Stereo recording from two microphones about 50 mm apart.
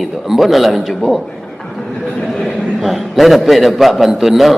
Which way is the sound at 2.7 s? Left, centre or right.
Centre.